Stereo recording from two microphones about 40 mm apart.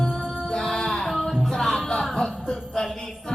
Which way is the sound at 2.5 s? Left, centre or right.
Centre.